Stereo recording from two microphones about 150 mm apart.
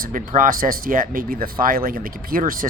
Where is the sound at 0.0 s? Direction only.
65° right (ahead or behind).